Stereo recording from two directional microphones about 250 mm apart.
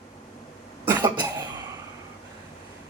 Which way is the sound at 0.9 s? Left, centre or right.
Centre.